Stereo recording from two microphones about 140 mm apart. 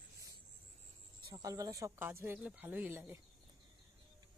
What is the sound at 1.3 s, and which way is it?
Speech, 25° right (ahead or behind).